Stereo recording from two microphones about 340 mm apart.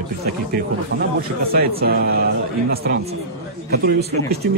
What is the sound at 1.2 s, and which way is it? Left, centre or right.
Speech, right.